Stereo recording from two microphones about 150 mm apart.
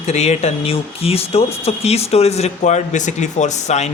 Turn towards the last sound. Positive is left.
turn(degrees=50)  # may be behind; listen again after turning